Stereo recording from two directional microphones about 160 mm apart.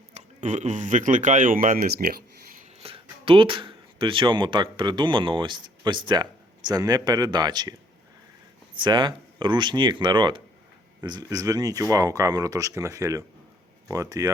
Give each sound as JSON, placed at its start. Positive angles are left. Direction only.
{"t": 0.1, "sound": "speech", "side_deg": -45}
{"t": 2.8, "sound": "speech", "side_deg": -35}
{"t": 8.8, "sound": "speech", "side_deg": -30}